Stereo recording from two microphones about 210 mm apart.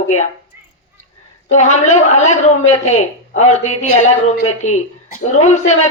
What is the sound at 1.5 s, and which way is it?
A woman's voice, 35° left (ahead or behind).